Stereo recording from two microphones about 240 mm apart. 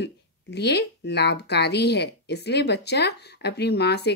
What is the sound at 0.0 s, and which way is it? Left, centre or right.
A woman's voice, left.